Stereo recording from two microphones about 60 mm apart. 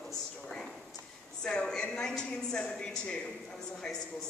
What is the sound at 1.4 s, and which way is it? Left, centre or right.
Speech, centre.